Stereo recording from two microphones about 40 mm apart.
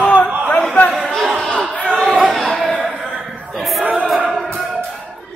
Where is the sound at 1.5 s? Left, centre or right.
Left.